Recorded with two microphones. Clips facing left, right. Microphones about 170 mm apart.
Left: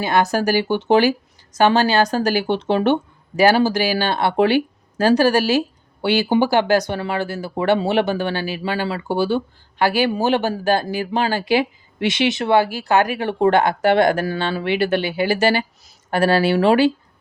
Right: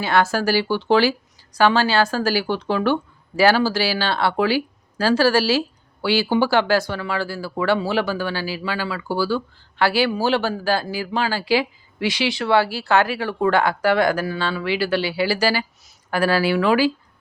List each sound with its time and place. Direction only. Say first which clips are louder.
0.0 s speech: left 1 dB; 15° left (ahead or behind)